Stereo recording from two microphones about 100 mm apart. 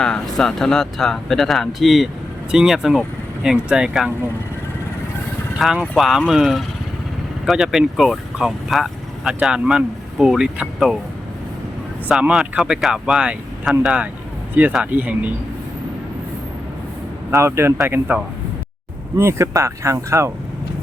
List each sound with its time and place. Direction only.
0.0 s speech: 5° left (ahead or behind)
5.5 s speech: 5° right (ahead or behind)
12.3 s speech: 5° right (ahead or behind)
17.3 s speech: 30° right (ahead or behind)